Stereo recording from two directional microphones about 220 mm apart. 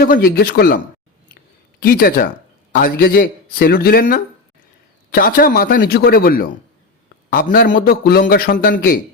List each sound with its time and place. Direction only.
0.0 s a man's voice: 45° left (ahead or behind)
1.9 s a man's voice: 45° left (ahead or behind)